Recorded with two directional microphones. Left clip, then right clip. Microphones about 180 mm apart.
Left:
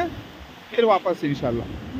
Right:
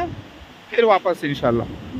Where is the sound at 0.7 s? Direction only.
65° right (ahead or behind).